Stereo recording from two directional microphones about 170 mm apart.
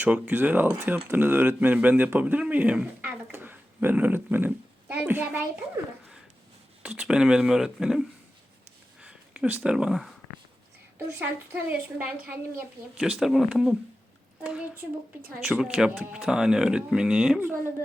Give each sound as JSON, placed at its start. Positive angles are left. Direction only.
{"t": 0.0, "sound": "speech", "side_deg": -10}
{"t": 6.8, "sound": "speech", "side_deg": -10}
{"t": 9.0, "sound": "a sound", "side_deg": -5}
{"t": 11.5, "sound": "a woman's voice", "side_deg": -10}